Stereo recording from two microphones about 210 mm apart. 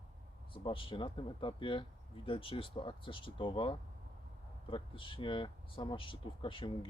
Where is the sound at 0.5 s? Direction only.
25° left (ahead or behind).